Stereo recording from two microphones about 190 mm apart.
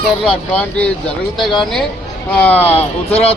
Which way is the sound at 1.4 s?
Centre (ahead or behind).